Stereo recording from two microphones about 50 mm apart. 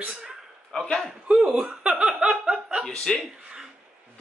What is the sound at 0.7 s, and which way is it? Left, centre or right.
Speech, centre.